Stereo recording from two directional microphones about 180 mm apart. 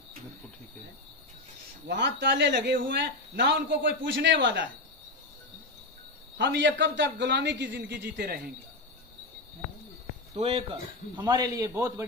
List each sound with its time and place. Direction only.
1.9 s speech: 75° right (ahead or behind)
6.3 s speech: 80° right
10.3 s speech: 35° right (ahead or behind); by 11.9 s 20° right (ahead or behind)